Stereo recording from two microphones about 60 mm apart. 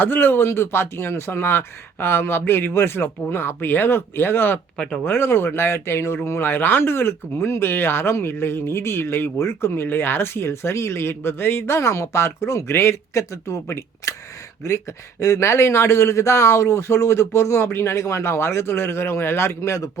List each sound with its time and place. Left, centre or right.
0.0 s speech: left
15.2 s speech: left